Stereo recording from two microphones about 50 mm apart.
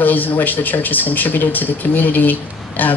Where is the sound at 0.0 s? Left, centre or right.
Left.